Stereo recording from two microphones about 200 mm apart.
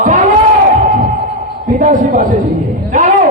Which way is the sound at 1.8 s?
40° right (ahead or behind).